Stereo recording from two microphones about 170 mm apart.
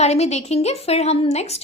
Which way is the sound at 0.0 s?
40° left (ahead or behind).